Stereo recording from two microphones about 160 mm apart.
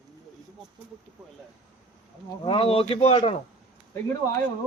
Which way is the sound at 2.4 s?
35° left (ahead or behind).